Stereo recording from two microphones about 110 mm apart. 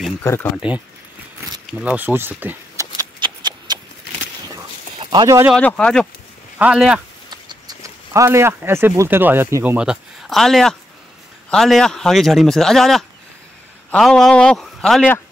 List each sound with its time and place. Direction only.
0.2 s speech: 25° left (ahead or behind)
0.6 s speech: 15° right (ahead or behind)
3.2 s shuffling cards: 45° right (ahead or behind)
5.1 s speech: 35° right (ahead or behind)
5.6 s a man's voice: 10° left (ahead or behind)
6.6 s speech: 10° right (ahead or behind)
7.2 s a sound: 40° right (ahead or behind)
8.1 s a man's voice: 25° right (ahead or behind); by 15.1 s 5° left (ahead or behind)